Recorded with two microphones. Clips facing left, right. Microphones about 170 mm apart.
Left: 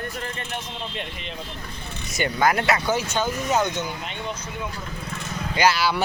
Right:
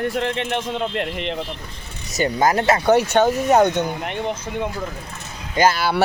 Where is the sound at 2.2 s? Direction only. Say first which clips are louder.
Right 3 dB; 40° right (ahead or behind).